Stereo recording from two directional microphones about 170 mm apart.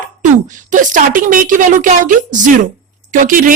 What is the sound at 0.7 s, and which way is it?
Speech, 50° right (ahead or behind).